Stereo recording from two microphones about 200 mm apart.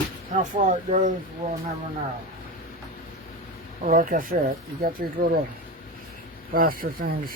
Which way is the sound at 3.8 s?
40° right (ahead or behind).